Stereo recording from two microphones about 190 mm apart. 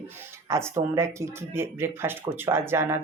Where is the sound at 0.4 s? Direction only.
15° right (ahead or behind).